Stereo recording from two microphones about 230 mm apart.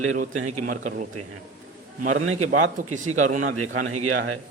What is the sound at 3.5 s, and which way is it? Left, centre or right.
Speech, right.